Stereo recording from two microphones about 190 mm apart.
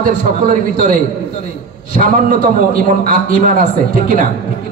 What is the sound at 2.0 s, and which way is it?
A man's voice, 45° right (ahead or behind).